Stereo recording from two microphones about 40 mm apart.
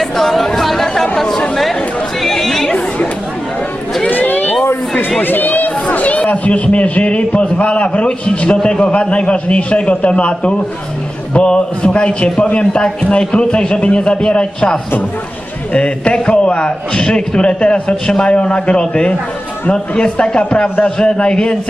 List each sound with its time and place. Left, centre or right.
0.0 s chatter: centre
4.1 s a sound: left
5.2 s chatter: left
5.9 s a man's voice: left
18.0 s a man's voice: centre
18.3 s a man's voice: left